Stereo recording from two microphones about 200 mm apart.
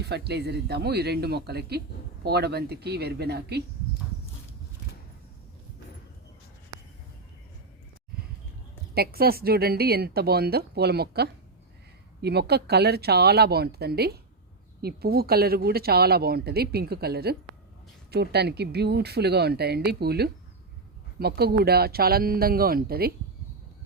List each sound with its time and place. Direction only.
0.0 s speech: 55° right (ahead or behind)
9.0 s speech: 50° right (ahead or behind)